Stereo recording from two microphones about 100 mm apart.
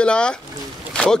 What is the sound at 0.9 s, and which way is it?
Boat, 10° left (ahead or behind).